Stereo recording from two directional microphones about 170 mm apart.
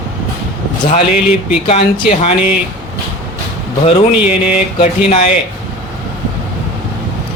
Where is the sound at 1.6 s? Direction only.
40° left (ahead or behind).